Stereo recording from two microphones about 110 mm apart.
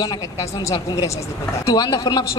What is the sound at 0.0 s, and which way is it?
A woman's voice, 35° left (ahead or behind).